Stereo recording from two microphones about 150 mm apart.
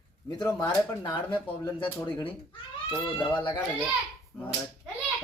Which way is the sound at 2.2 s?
35° left (ahead or behind).